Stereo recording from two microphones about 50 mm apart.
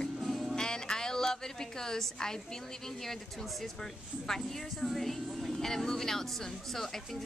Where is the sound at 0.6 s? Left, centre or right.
Centre.